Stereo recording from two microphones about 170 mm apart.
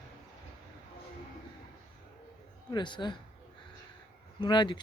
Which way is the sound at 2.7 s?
25° left (ahead or behind).